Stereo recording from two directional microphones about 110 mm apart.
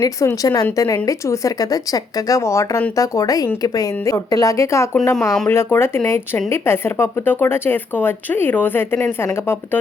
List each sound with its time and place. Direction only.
0.0 s speech: 30° left (ahead or behind)